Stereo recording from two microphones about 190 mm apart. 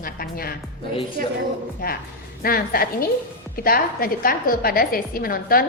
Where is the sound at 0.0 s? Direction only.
50° left (ahead or behind).